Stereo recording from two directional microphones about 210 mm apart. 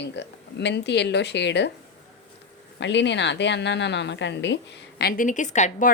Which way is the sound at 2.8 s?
55° left (ahead or behind).